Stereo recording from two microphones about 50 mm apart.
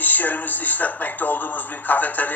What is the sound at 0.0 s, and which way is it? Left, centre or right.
Speech, left.